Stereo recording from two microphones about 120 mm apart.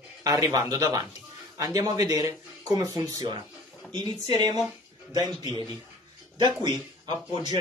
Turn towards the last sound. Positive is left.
turn(degrees=-40)  # may be behind; listen again after turning